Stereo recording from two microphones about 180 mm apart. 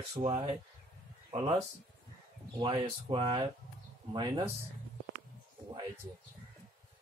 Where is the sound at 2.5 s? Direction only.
25° right (ahead or behind).